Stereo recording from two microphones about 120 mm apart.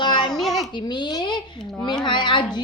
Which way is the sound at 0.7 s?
40° left (ahead or behind).